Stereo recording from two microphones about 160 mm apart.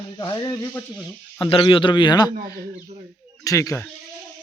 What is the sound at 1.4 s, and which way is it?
Speech, 30° left (ahead or behind).